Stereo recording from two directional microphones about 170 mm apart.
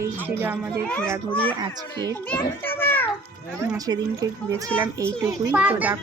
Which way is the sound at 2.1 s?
10° left (ahead or behind).